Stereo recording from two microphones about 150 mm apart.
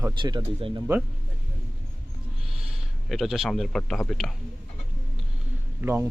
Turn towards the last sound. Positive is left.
turn(degrees=-15)  # may be behind; listen again after turning